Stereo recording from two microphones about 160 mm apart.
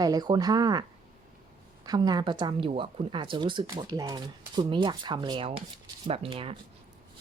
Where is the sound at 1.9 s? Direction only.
25° right (ahead or behind).